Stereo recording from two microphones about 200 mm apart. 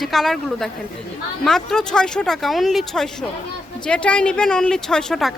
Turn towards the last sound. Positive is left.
turn(degrees=0)  # may be behind; listen again after turning